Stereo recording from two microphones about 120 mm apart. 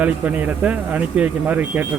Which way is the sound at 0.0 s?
15° right (ahead or behind).